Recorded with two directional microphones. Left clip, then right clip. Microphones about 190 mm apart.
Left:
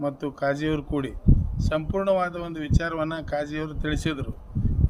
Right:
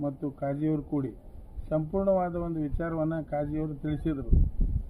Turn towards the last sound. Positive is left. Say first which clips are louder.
# left 4 dB
turn(degrees=40)  # may be behind; listen again after turning